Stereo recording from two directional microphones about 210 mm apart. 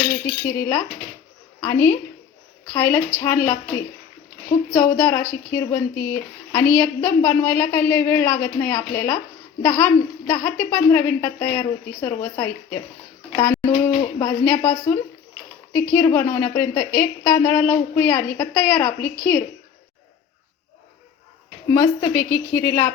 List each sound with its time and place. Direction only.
0.4 s speech: 10° left (ahead or behind)
4.7 s speech: 15° left (ahead or behind)
21.7 s speech: 15° left (ahead or behind)